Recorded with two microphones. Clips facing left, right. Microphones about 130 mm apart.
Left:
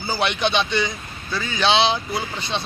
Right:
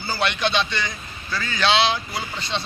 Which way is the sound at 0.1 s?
15° left (ahead or behind).